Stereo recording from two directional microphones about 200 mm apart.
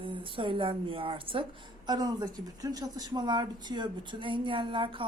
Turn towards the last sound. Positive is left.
turn(degrees=-25)  # may be behind; listen again after turning